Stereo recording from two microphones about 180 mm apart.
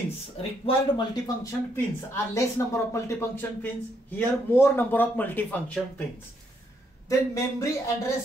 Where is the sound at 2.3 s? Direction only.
15° left (ahead or behind).